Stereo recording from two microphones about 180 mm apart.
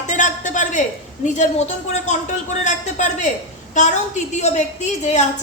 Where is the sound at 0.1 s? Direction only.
45° left (ahead or behind).